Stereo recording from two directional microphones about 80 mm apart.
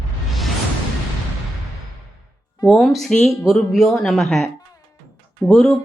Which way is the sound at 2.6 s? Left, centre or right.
Centre.